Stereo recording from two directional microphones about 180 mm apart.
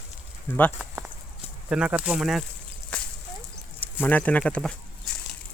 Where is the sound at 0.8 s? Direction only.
10° right (ahead or behind).